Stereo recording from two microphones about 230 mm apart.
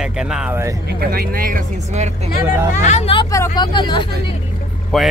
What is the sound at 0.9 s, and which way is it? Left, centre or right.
Speech, right.